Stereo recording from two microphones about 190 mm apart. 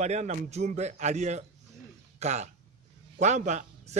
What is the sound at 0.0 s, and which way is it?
A man's voice, 35° right (ahead or behind).